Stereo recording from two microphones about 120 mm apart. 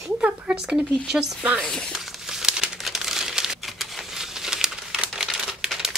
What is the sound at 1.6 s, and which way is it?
Crumpling, 5° left (ahead or behind).